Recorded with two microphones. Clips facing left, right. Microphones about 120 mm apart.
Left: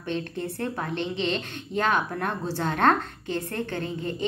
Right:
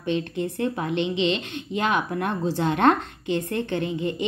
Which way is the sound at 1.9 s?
15° right (ahead or behind).